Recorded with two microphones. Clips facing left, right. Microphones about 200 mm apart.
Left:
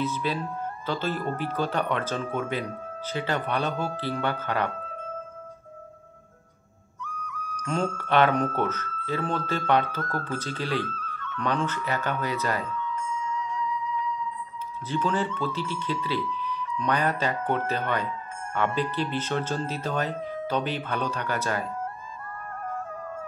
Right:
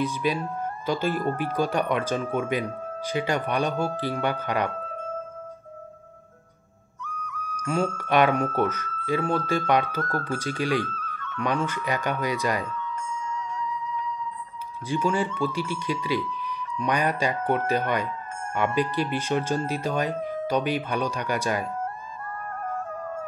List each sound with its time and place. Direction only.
0.0 s speech: 15° right (ahead or behind)
7.0 s music: 50° right (ahead or behind)
7.6 s speech: 10° right (ahead or behind)
12.6 s a sound: 45° right (ahead or behind)
14.9 s speech: 10° right (ahead or behind)
22.7 s music: 45° right (ahead or behind)